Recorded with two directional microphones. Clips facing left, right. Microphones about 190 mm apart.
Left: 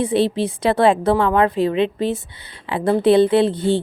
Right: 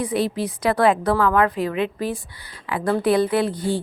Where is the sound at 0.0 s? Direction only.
30° left (ahead or behind).